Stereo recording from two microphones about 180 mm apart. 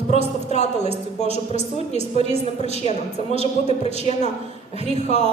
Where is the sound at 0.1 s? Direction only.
40° left (ahead or behind).